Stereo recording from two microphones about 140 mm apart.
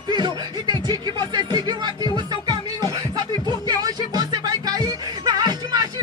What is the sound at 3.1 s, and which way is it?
Music, 30° right (ahead or behind).